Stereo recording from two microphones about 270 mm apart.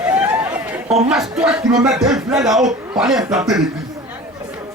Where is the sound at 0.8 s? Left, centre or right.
Right.